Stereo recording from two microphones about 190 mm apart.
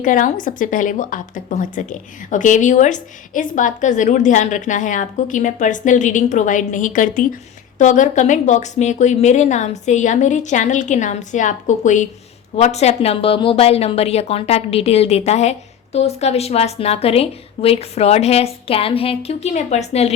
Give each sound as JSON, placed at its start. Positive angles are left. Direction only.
{"t": 0.0, "sound": "a woman's voice", "side_deg": 45}